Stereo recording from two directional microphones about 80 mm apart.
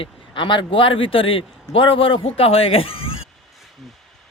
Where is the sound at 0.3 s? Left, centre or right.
Left.